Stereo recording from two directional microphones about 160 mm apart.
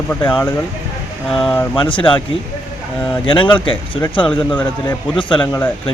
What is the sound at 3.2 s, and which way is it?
Speech, 30° left (ahead or behind).